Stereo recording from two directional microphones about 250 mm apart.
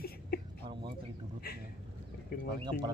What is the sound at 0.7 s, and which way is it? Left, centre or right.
Speech, centre.